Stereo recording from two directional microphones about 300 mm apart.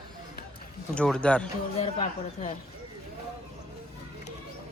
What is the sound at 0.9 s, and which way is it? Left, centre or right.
Speech, centre.